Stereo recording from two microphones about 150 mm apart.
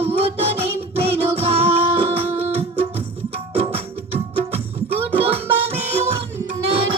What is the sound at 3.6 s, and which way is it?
Music, 40° right (ahead or behind).